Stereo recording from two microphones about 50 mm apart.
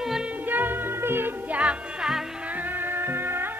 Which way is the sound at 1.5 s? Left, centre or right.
Right.